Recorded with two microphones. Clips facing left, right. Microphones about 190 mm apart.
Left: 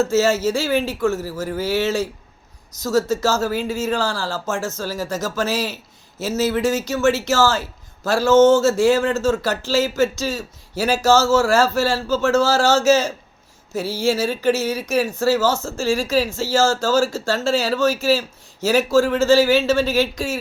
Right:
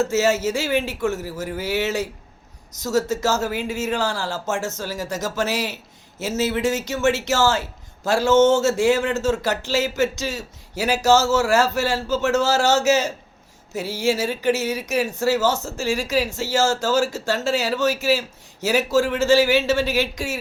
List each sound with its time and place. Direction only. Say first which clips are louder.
0.0 s a man's voice: left 2 dB; 20° right (ahead or behind)